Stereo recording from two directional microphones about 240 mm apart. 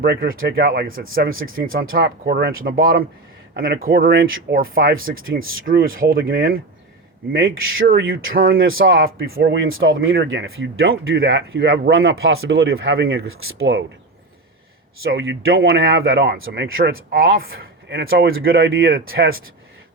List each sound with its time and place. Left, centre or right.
0.0 s speech: right
5.2 s speech: right
5.6 s speech: right
7.8 s speech: right
8.5 s speech: right
9.6 s speech: right
15.1 s speech: right
18.4 s speech: right